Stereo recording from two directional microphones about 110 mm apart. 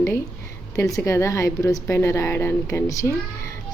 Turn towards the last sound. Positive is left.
turn(degrees=25)  # may be behind; listen again after turning